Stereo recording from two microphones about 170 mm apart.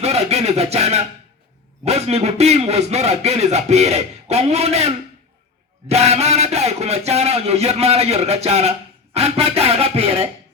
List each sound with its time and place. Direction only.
0.0 s a man's voice: 40° right (ahead or behind)